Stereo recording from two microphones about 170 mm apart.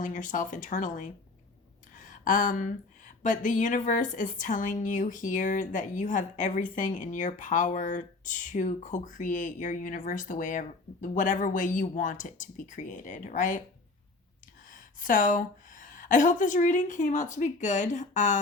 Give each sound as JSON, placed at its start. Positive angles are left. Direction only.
{"t": 0.0, "sound": "speech", "side_deg": 50}
{"t": 2.0, "sound": "a sound", "side_deg": 50}
{"t": 3.2, "sound": "speech", "side_deg": 50}
{"t": 14.7, "sound": "a woman's voice", "side_deg": 50}